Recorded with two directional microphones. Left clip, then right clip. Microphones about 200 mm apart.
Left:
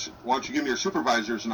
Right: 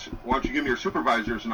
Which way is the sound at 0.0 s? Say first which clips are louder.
Even; 25° left (ahead or behind).